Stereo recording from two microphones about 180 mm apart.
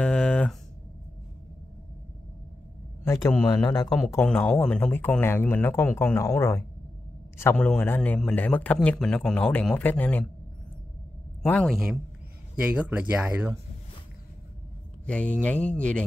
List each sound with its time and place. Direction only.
0.0 s a sound: 5° left (ahead or behind)
3.1 s a man's voice: 15° left (ahead or behind)
4.1 s a man's voice: 10° left (ahead or behind)
11.4 s speech: 5° left (ahead or behind)
15.0 s a man's voice: 5° left (ahead or behind)